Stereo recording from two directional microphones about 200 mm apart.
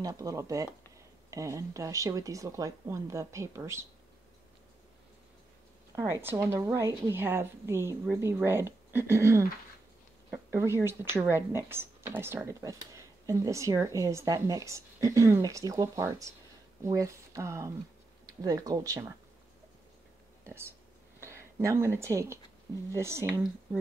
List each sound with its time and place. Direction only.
0.0 s speech: 15° right (ahead or behind)
5.9 s speech: 15° right (ahead or behind)
20.4 s speech: 10° right (ahead or behind)